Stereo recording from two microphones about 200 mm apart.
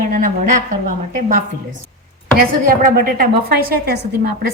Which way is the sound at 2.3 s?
45° right (ahead or behind).